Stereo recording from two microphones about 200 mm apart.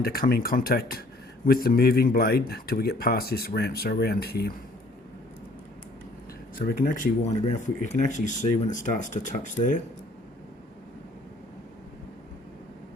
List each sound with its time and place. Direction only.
0.0 s speech: 50° left (ahead or behind)
6.7 s speech: 45° left (ahead or behind)